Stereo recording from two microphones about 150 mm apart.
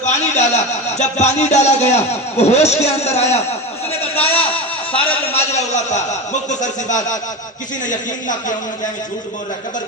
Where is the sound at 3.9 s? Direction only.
40° left (ahead or behind).